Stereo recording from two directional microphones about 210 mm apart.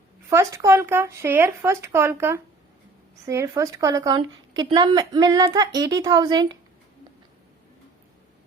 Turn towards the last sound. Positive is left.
turn(degrees=-20)  # may be behind; listen again after turning